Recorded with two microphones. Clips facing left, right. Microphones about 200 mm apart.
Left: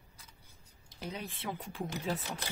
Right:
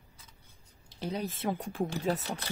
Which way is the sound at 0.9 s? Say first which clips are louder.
Right 7 dB; 35° right (ahead or behind).